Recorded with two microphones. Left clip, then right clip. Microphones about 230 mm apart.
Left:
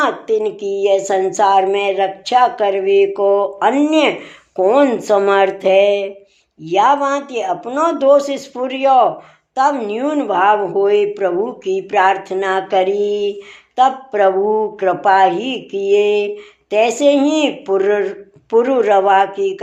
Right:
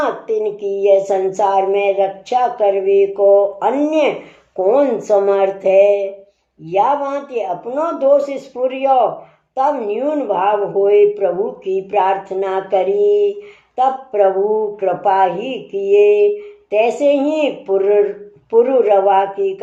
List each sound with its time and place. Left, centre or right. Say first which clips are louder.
0.0 s a woman's voice: left 2 dB; left